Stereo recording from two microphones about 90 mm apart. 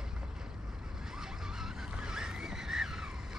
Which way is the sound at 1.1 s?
5° right (ahead or behind).